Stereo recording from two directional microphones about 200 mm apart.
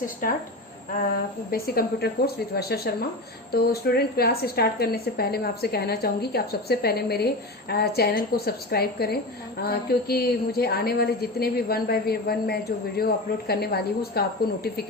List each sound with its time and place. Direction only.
0.2 s a woman's voice: 45° left (ahead or behind)
1.5 s a woman's voice: 50° left (ahead or behind)